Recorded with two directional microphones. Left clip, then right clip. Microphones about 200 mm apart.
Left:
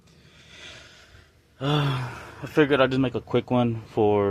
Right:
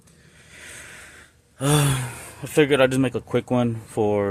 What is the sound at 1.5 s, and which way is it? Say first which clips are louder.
Speech: right 4 dB; 35° right (ahead or behind).